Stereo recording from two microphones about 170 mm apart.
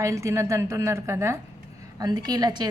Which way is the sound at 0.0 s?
15° right (ahead or behind).